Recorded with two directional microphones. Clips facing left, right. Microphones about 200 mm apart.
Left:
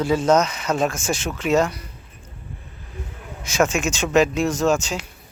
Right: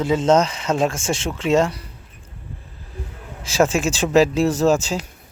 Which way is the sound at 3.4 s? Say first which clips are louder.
Right 2 dB; 30° right (ahead or behind).